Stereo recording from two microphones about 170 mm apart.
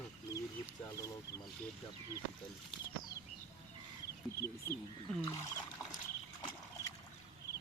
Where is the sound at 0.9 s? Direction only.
20° left (ahead or behind).